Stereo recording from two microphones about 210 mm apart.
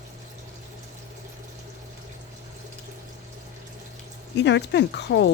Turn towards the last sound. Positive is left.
turn(degrees=55)  # may be behind; listen again after turning